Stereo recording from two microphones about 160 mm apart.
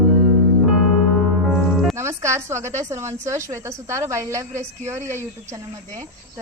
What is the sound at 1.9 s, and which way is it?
A woman's voice, 15° right (ahead or behind).